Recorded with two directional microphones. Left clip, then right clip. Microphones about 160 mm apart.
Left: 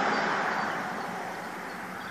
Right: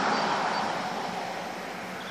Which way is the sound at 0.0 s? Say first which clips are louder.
Right 1 dB; 35° right (ahead or behind).